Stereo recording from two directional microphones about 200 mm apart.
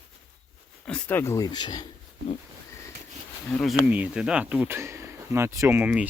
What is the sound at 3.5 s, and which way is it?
Speech, 10° left (ahead or behind).